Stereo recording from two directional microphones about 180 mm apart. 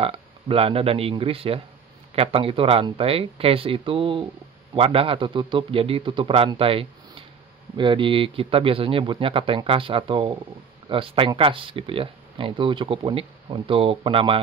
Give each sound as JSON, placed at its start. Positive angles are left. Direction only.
{"t": 0.0, "sound": "a man's voice", "side_deg": -30}